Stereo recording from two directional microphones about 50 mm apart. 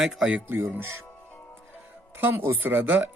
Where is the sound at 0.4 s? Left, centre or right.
Right.